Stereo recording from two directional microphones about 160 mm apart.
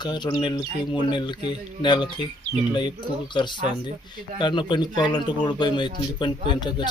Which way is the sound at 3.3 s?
30° left (ahead or behind).